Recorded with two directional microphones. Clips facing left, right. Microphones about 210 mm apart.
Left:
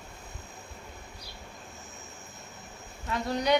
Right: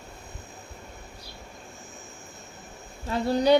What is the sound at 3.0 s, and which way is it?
Speech, 30° right (ahead or behind).